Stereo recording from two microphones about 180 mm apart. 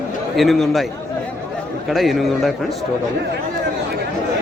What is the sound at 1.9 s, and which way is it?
Speech, centre (ahead or behind).